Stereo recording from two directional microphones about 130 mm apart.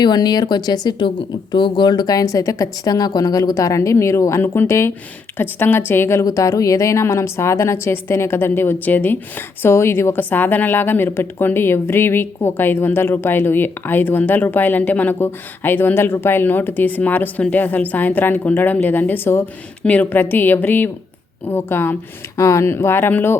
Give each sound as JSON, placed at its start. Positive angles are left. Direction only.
{"t": 0.0, "sound": "a woman's voice", "side_deg": 30}